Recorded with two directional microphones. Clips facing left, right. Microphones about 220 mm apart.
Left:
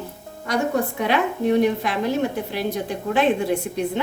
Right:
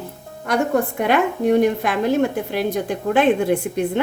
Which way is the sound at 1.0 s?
50° right (ahead or behind).